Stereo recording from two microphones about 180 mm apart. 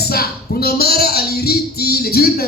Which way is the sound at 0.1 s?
60° left (ahead or behind).